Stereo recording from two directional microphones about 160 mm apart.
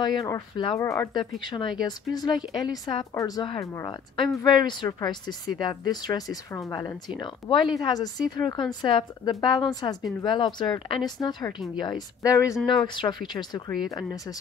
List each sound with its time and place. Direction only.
0.0 s speech: 25° left (ahead or behind)